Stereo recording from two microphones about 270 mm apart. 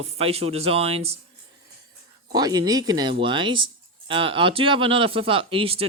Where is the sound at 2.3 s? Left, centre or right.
Centre.